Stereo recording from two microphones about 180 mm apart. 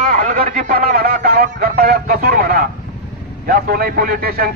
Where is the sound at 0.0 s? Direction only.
45° right (ahead or behind).